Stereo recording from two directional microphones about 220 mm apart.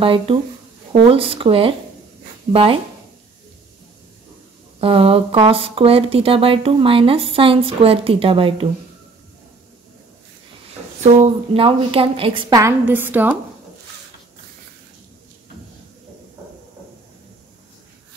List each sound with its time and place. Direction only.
0.0 s speech: 25° right (ahead or behind)
4.7 s speech: 25° right (ahead or behind)
11.0 s speech: 25° right (ahead or behind); by 13.4 s 10° right (ahead or behind)